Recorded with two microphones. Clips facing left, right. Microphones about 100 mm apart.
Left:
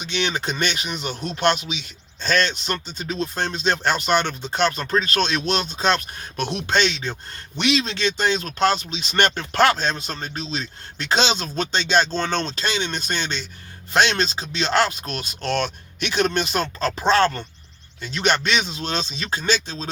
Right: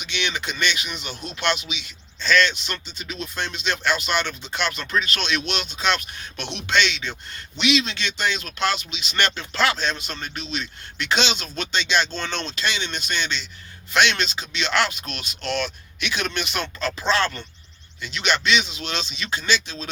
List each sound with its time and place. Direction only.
0.0 s speech: 40° left (ahead or behind)
10.1 s speech: 35° left (ahead or behind)